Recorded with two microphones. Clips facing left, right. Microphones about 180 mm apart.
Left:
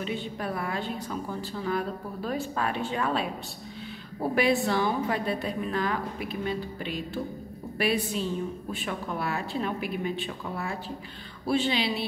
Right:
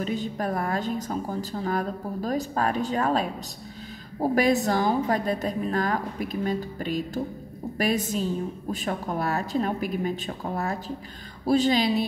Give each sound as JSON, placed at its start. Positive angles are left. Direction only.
{"t": 0.0, "sound": "a woman's voice", "side_deg": -40}